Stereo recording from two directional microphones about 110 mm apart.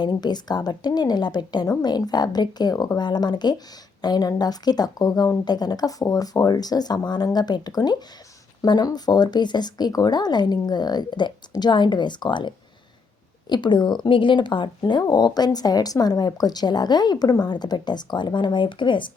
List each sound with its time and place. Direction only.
0.0 s a woman's voice: 40° left (ahead or behind)